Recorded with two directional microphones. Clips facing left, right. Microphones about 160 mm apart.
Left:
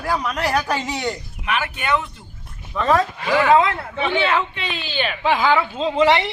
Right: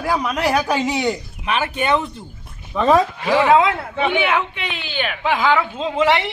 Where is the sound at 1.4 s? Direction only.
25° right (ahead or behind).